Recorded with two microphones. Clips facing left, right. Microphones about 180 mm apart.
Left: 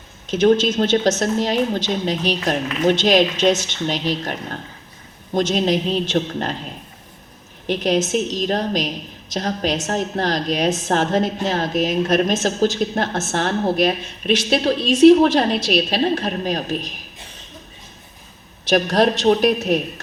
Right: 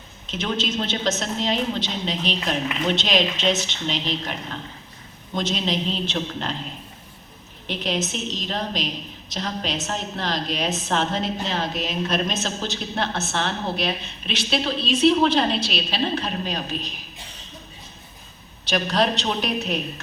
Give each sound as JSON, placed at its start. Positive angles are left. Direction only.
{"t": 0.3, "sound": "a woman's voice", "side_deg": 45}
{"t": 7.7, "sound": "a woman's voice", "side_deg": 45}
{"t": 18.7, "sound": "a woman's voice", "side_deg": 45}